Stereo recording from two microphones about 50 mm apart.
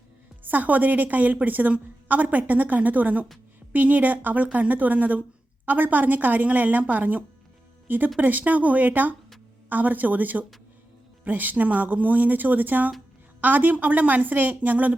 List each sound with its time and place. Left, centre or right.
0.4 s a woman's voice: right